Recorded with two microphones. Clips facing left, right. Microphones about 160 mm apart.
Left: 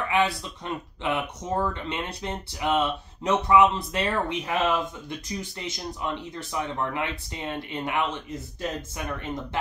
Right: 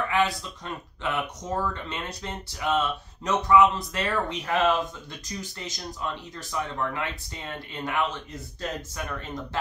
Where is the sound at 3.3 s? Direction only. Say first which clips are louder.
Even; 25° left (ahead or behind).